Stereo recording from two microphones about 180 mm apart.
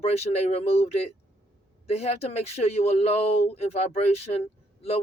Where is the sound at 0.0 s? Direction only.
35° left (ahead or behind).